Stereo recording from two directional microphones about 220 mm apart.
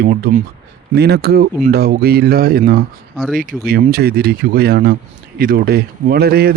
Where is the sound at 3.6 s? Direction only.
45° right (ahead or behind).